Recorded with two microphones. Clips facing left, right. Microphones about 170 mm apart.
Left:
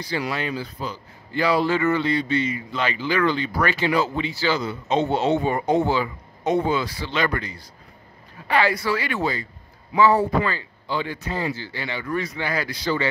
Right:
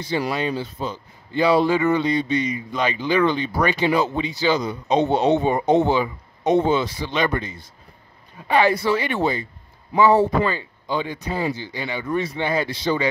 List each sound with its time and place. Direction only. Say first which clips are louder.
0.5 s a man's voice: right 3 dB; 25° right (ahead or behind)